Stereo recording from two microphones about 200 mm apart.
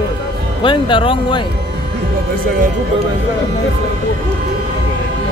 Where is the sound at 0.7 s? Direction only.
25° left (ahead or behind).